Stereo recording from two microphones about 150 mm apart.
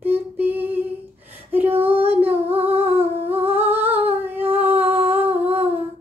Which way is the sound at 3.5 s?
10° right (ahead or behind).